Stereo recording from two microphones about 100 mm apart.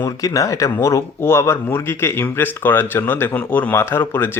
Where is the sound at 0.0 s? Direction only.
40° left (ahead or behind).